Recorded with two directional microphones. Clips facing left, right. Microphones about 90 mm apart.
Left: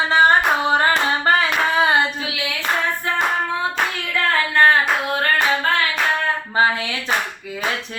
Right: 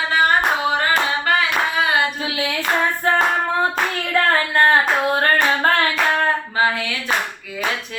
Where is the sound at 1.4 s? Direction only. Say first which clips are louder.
Left 2 dB; 30° left (ahead or behind).